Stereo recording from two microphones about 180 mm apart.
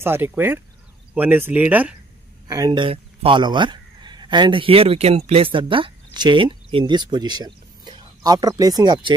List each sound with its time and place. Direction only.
0.0 s speech: 10° right (ahead or behind)
2.4 s speech: 20° right (ahead or behind)